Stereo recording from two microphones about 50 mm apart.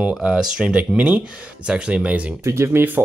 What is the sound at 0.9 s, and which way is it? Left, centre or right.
Speech, right.